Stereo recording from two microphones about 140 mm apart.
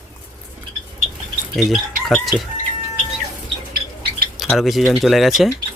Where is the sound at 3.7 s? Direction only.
90° right.